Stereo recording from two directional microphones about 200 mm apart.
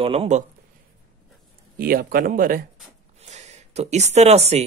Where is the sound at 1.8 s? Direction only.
45° right (ahead or behind).